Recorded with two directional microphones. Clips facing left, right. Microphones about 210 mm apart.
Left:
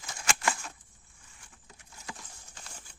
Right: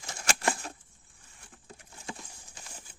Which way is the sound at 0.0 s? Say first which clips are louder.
Right 2 dB; 35° right (ahead or behind).